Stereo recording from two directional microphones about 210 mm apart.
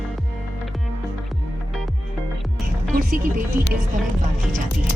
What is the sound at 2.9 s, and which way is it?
Music, 45° right (ahead or behind).